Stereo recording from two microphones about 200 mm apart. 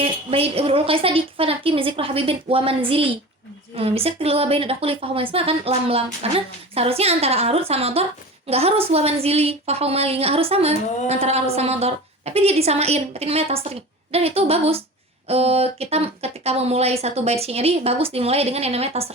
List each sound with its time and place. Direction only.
0.0 s a woman's voice: 30° right (ahead or behind)